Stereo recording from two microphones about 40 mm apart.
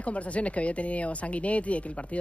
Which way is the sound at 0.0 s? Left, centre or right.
Left.